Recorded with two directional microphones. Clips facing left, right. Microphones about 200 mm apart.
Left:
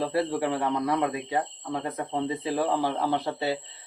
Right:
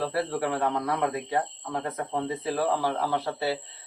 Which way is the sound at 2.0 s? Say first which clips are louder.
Left 1 dB; 15° left (ahead or behind).